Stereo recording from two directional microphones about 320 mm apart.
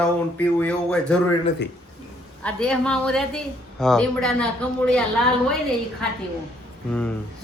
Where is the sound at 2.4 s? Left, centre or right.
Centre.